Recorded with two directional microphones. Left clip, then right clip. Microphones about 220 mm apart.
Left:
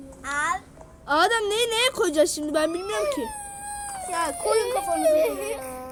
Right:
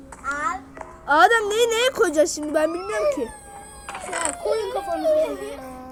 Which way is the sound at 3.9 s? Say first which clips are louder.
Right 1 dB; 35° right (ahead or behind).